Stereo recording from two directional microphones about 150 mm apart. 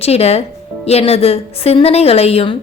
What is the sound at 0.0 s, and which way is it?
A woman's voice, 45° left (ahead or behind).